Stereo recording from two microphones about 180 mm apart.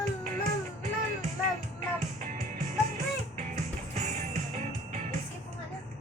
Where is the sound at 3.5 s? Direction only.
40° right (ahead or behind).